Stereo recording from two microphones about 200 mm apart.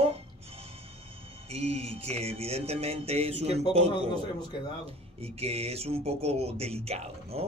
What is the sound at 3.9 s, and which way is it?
Speech, 20° left (ahead or behind).